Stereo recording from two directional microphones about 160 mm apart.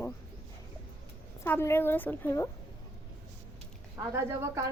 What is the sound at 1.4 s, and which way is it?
A woman's voice, 15° left (ahead or behind).